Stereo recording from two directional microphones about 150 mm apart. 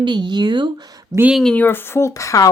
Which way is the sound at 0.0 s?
30° right (ahead or behind).